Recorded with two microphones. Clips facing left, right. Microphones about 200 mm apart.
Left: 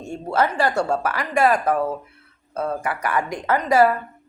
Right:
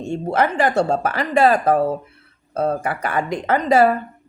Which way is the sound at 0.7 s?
30° right (ahead or behind).